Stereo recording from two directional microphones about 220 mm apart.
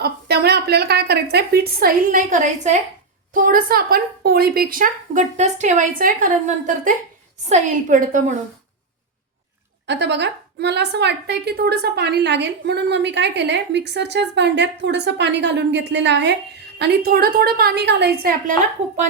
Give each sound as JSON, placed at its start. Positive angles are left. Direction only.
{"t": 0.0, "sound": "a woman's voice", "side_deg": -45}
{"t": 7.4, "sound": "speech", "side_deg": -35}
{"t": 9.8, "sound": "a woman's voice", "side_deg": -50}